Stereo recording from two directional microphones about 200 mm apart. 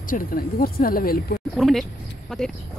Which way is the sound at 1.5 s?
Centre (ahead or behind).